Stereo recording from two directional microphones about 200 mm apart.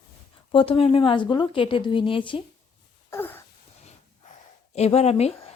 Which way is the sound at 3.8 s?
35° left (ahead or behind).